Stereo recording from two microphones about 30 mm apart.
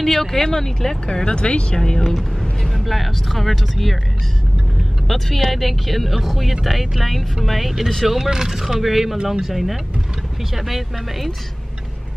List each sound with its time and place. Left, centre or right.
0.0 s speech: centre
1.0 s speech: left
1.8 s speech: centre
2.6 s speech: centre
5.0 s speech: centre
8.1 s speech: centre